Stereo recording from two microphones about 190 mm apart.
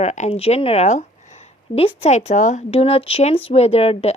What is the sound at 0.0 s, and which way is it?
Speech, 35° left (ahead or behind).